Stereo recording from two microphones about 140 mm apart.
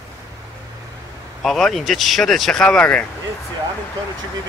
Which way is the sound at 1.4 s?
Centre (ahead or behind).